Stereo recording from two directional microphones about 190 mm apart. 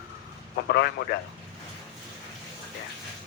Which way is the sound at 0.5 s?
55° left (ahead or behind).